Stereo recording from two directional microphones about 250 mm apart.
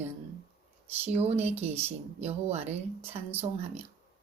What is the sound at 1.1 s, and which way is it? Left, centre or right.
Speech, right.